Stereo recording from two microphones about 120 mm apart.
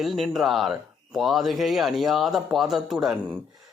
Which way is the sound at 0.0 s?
Centre (ahead or behind).